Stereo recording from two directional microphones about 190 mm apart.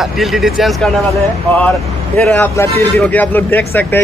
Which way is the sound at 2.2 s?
10° left (ahead or behind).